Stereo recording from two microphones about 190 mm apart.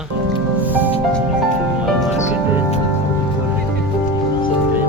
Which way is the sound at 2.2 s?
40° left (ahead or behind).